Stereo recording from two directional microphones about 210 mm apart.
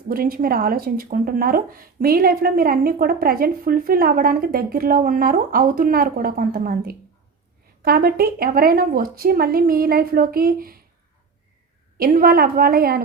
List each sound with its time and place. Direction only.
0.1 s speech: 45° right (ahead or behind)
11.9 s speech: 45° right (ahead or behind)